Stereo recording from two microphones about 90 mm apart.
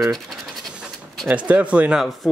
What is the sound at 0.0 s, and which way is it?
Speech, centre (ahead or behind).